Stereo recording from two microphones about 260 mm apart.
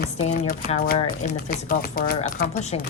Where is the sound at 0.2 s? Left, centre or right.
Left.